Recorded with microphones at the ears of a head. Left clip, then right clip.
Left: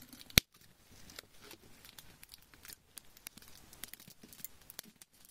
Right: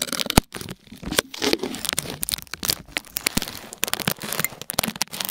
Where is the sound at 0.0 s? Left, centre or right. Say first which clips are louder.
Right 10 dB; right.